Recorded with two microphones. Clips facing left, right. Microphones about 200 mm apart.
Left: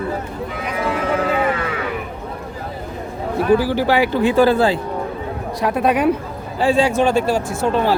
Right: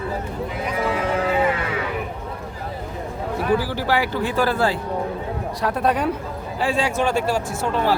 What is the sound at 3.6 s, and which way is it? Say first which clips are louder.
Speech: left 6 dB; 20° left (ahead or behind).